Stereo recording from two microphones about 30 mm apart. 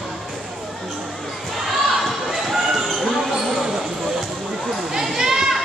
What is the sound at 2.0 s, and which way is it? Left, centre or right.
Basketball bounce, centre.